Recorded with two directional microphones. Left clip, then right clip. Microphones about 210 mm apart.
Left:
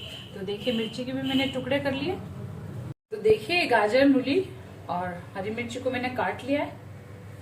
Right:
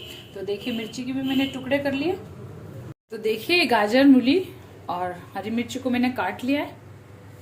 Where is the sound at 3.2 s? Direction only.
50° right (ahead or behind).